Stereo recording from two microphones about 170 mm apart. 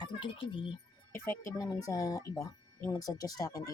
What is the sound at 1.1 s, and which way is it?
Speech, 15° left (ahead or behind).